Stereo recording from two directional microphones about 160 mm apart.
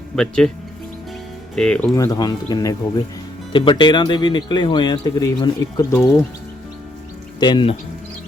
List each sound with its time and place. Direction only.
0.2 s speech: 5° left (ahead or behind)
1.5 s speech: 5° left (ahead or behind)
2.0 s speech: 25° left (ahead or behind)
7.3 s speech: 30° left (ahead or behind)